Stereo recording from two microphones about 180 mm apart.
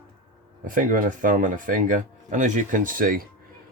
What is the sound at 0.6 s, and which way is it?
Speech, 50° right (ahead or behind).